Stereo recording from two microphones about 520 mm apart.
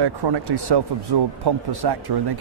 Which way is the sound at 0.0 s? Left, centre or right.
Right.